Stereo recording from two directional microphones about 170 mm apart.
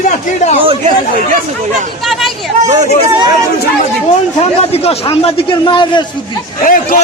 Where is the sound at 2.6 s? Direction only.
40° right (ahead or behind).